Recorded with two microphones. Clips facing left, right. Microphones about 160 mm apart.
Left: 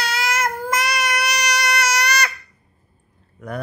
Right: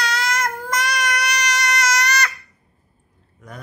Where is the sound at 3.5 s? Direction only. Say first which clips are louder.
Left 10 dB; 60° left (ahead or behind).